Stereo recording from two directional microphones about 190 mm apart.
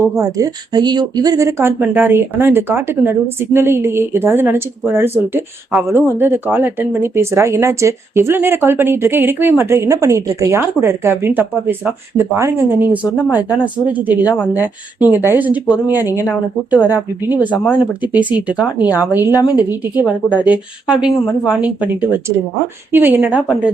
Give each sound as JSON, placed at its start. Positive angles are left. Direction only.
{"t": 0.0, "sound": "speech", "side_deg": -15}
{"t": 15.0, "sound": "speech", "side_deg": -10}
{"t": 19.2, "sound": "a woman's voice", "side_deg": 20}
{"t": 19.5, "sound": "speech", "side_deg": -5}
{"t": 22.9, "sound": "speech", "side_deg": -10}